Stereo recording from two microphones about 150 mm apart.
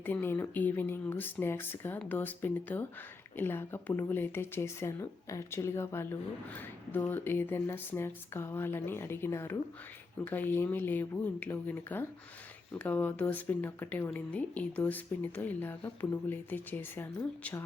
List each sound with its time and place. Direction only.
0.0 s speech: 15° left (ahead or behind)